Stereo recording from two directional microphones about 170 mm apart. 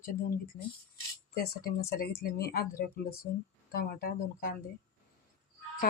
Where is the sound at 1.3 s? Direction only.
65° left (ahead or behind).